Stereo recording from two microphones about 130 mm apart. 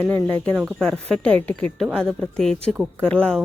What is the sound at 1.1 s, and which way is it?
Speech, 10° left (ahead or behind).